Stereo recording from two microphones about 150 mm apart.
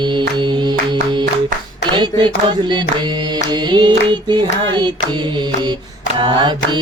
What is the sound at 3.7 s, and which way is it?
Music, 30° right (ahead or behind).